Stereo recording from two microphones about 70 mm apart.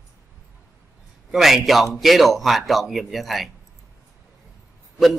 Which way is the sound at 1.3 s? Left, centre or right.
Centre.